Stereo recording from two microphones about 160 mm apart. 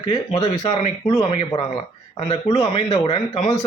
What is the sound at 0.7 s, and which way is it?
A man's voice, 40° left (ahead or behind).